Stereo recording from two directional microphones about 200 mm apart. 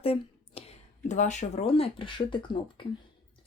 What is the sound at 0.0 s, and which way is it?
Speech, 30° left (ahead or behind).